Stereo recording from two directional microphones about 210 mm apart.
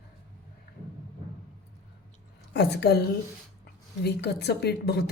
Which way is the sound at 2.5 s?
50° left (ahead or behind).